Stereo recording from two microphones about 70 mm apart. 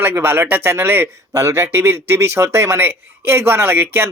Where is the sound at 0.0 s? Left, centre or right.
Right.